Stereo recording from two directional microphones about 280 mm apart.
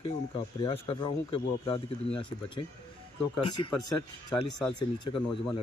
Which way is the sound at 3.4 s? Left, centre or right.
Centre.